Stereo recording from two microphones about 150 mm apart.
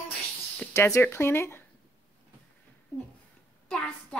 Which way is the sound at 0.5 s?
20° left (ahead or behind).